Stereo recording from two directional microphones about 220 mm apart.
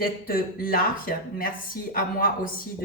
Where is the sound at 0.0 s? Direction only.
40° left (ahead or behind).